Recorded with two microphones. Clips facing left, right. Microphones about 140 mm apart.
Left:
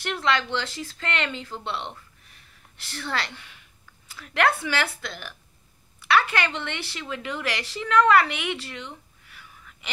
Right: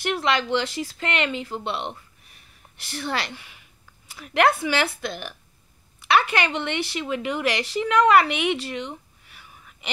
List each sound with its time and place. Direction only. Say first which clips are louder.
0.0 s speech: right 2 dB; 15° right (ahead or behind)